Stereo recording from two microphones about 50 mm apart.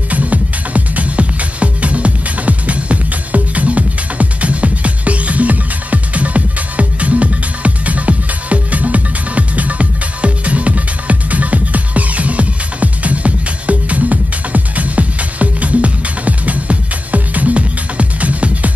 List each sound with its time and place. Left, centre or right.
0.1 s music: right